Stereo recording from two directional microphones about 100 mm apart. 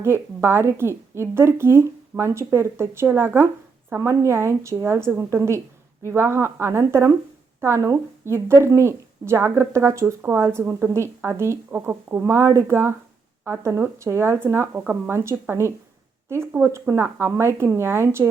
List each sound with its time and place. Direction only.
0.0 s speech: 25° right (ahead or behind)
10.2 s speech: 15° right (ahead or behind)